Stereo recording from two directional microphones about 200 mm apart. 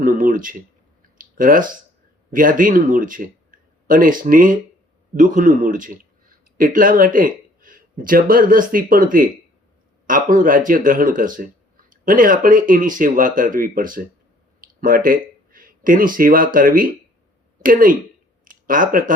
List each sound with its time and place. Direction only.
0.0 s speech: 40° right (ahead or behind)